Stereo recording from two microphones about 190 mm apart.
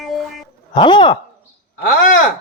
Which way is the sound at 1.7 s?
45° left (ahead or behind).